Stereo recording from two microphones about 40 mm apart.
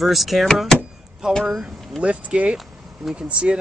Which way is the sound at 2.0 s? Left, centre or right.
Right.